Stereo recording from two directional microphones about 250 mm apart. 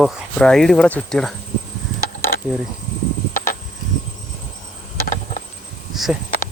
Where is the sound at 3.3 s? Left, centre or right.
Left.